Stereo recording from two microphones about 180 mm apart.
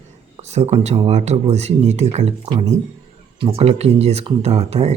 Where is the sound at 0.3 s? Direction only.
35° right (ahead or behind).